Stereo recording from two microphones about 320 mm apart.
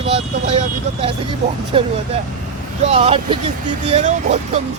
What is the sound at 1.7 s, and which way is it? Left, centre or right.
Speech, centre.